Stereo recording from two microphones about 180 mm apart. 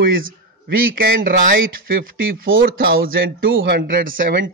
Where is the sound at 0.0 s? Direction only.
55° right (ahead or behind).